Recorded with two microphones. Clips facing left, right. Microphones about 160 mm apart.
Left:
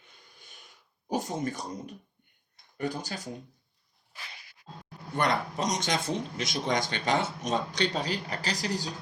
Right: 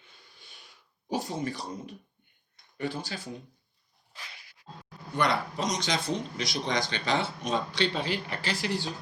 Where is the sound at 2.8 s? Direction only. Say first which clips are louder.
Left 1 dB; 45° left (ahead or behind).